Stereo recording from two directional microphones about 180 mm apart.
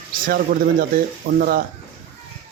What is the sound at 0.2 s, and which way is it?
Speech, 50° right (ahead or behind).